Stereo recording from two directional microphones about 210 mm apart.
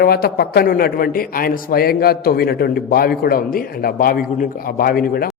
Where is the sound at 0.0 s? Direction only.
45° left (ahead or behind).